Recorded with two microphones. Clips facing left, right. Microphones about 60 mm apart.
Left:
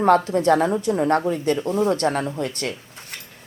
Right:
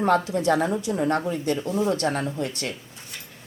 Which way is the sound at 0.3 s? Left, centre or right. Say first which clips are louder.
Left 4 dB; left.